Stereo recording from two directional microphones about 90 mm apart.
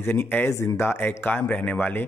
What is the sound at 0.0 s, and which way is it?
Speech, 25° left (ahead or behind).